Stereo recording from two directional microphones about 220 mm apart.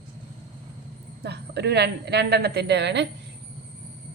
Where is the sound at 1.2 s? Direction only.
50° right (ahead or behind).